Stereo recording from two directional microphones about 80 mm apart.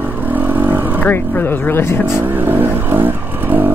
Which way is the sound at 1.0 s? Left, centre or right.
Left.